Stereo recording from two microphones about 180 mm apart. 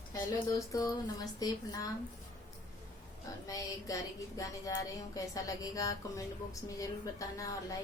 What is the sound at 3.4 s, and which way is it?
Speech, 20° left (ahead or behind).